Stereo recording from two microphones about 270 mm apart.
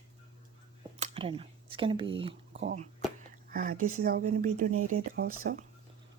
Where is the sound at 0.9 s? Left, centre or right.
Right.